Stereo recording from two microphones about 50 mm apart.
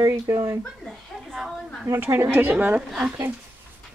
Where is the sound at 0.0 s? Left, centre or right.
Right.